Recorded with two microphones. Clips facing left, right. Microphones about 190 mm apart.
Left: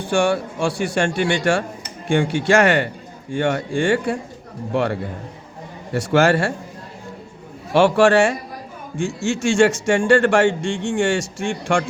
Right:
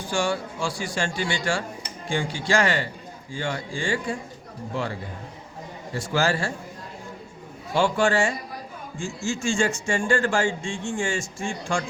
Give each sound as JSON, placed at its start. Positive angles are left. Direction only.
{"t": 0.0, "sound": "a man's voice", "side_deg": 65}
{"t": 7.7, "sound": "a man's voice", "side_deg": 75}